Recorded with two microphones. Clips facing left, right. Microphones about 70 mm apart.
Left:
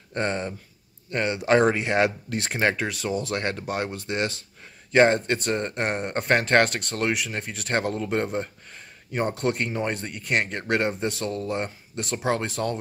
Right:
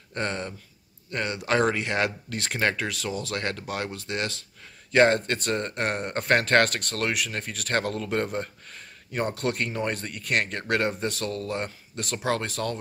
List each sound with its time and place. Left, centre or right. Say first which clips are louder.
0.1 s speech: left 3 dB; centre